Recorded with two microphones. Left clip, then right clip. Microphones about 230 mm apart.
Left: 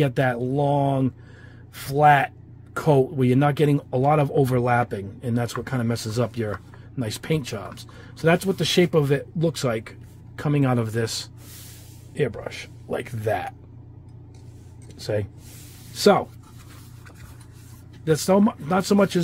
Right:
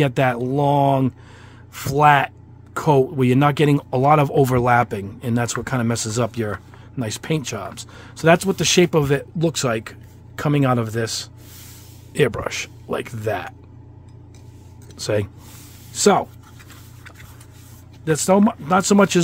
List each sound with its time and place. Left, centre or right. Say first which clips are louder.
0.0 s speech: right 4 dB; right
12.1 s speech: right 7 dB; right; by 13.6 s centre
15.0 s speech: right 5 dB; centre
18.0 s speech: right 3 dB; centre